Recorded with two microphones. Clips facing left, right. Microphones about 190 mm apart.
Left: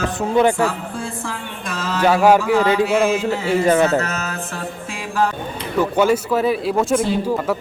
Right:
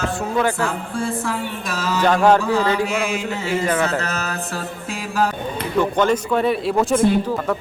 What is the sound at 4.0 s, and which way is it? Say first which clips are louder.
Music: even; 35° right (ahead or behind).